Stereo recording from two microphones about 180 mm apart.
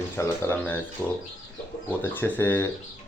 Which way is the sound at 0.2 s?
10° left (ahead or behind).